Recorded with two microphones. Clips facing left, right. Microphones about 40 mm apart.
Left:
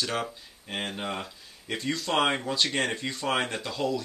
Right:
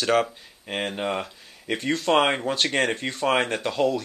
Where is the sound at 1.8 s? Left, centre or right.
Right.